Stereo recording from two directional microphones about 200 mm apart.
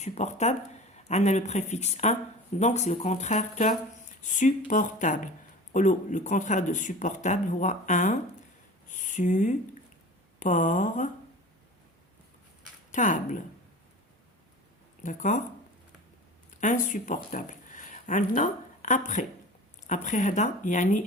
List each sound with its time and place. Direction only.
0.0 s speech: 35° left (ahead or behind)
8.9 s a sound: 40° left (ahead or behind)
10.4 s speech: 40° left (ahead or behind)
12.9 s speech: 40° left (ahead or behind)
15.0 s speech: 40° left (ahead or behind)
16.6 s speech: 40° left (ahead or behind)
17.3 s a sound: 40° left (ahead or behind)
19.9 s speech: 40° left (ahead or behind)